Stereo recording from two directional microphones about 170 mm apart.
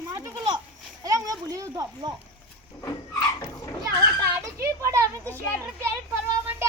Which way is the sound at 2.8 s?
25° left (ahead or behind).